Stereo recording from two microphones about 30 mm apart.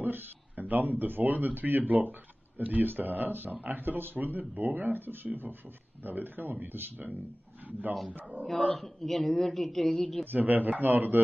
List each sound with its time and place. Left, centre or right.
0.6 s speech: right
8.1 s speech: right
8.7 s a woman's voice: centre
9.8 s speech: left
10.2 s speech: right